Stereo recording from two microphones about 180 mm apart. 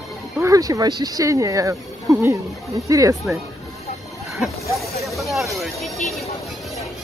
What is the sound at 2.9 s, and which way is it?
Speech, 20° right (ahead or behind).